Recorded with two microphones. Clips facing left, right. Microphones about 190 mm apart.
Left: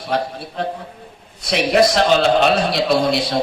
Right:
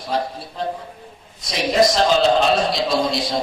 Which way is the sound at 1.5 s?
65° left (ahead or behind).